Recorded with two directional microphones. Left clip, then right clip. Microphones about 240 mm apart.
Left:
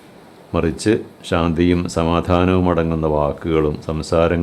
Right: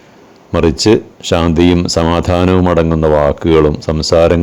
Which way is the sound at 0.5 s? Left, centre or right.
Right.